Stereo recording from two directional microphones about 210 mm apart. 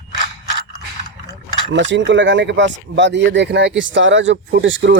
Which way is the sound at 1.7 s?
60° right (ahead or behind).